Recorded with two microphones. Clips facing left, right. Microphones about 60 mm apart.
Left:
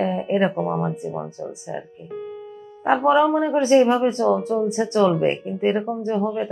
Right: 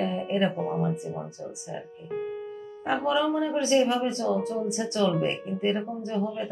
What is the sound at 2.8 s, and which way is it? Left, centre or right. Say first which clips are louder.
Speech: left 8 dB; left.